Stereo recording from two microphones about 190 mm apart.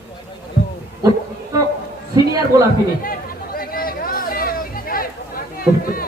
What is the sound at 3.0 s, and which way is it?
Chatter, 50° left (ahead or behind).